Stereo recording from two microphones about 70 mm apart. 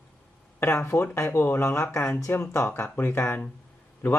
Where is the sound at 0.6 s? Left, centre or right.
Left.